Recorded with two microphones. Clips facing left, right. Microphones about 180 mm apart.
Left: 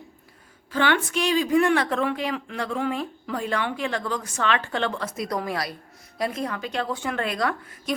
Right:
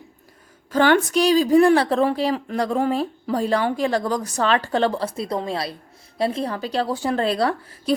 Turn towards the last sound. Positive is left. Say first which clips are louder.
# right 6 dB
turn(degrees=-30)  # may be behind; listen again after turning